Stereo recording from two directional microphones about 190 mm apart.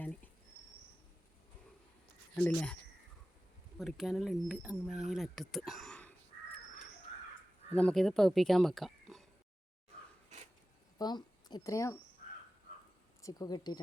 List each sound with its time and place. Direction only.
2.3 s speech: 5° left (ahead or behind)
3.8 s speech: centre (ahead or behind)
7.7 s speech: 5° left (ahead or behind)
10.9 s speech: 20° left (ahead or behind)
13.2 s speech: 20° left (ahead or behind)